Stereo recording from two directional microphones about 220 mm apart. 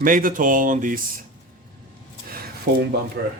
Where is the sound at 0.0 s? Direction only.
40° right (ahead or behind).